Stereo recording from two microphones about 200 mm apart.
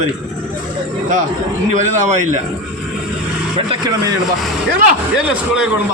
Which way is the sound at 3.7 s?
20° right (ahead or behind).